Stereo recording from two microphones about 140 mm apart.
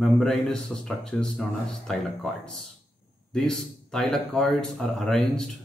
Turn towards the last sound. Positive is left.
turn(degrees=0)  # may be behind; listen again after turning